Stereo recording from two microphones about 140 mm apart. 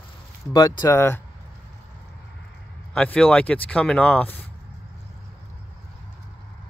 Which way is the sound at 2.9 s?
5° left (ahead or behind).